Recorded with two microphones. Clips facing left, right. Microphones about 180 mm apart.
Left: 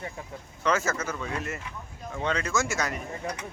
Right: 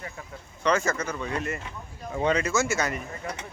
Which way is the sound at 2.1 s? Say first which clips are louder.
Right 4 dB; 10° right (ahead or behind).